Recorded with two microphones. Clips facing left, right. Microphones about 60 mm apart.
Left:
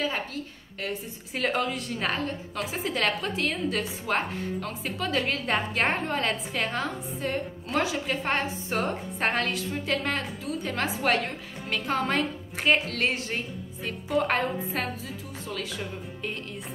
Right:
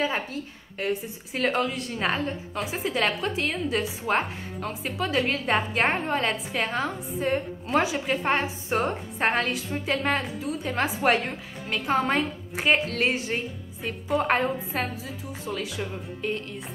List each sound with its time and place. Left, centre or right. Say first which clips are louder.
0.0 s a woman's voice: right 2 dB; centre
1.3 s a woman's voice: right 2 dB; centre